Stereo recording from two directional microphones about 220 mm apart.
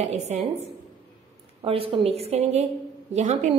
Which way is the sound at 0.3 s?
30° right (ahead or behind).